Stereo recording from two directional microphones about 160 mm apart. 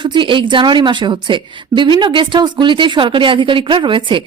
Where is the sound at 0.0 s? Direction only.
30° right (ahead or behind).